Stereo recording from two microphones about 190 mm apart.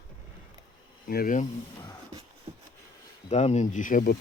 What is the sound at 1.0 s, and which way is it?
Speech, 50° left (ahead or behind).